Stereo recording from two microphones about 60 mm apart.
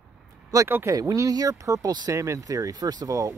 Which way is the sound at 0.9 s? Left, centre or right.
Right.